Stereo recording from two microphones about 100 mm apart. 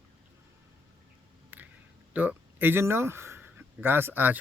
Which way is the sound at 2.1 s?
20° right (ahead or behind).